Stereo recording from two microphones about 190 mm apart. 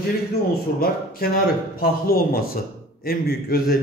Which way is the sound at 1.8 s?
50° left (ahead or behind).